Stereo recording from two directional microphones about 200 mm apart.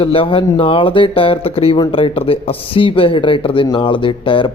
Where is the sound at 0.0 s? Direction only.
25° left (ahead or behind).